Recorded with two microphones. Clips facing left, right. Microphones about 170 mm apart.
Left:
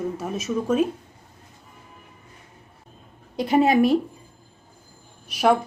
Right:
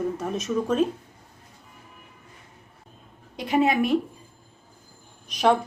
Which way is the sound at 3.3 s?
35° left (ahead or behind).